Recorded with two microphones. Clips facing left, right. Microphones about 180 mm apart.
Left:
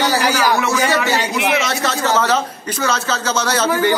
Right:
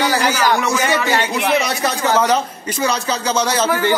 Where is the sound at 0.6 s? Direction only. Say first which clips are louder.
Left 1 dB; 15° right (ahead or behind).